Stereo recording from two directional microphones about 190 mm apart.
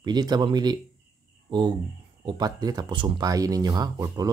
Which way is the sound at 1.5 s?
25° right (ahead or behind).